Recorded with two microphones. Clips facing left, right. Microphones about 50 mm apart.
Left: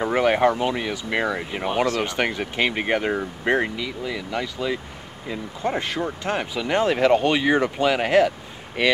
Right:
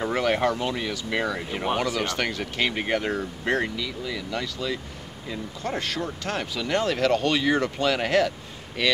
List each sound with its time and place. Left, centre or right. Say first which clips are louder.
0.0 s speech: left 4 dB; centre